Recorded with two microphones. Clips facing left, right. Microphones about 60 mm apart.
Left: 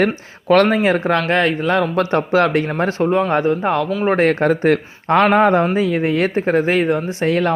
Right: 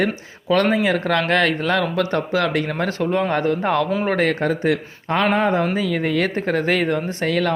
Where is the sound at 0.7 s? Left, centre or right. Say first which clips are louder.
Left 3 dB; left.